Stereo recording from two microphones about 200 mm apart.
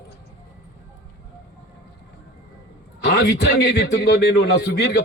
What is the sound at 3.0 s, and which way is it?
A man's voice, 55° left (ahead or behind).